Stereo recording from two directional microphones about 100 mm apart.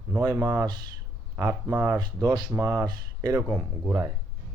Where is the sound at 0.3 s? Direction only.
30° right (ahead or behind).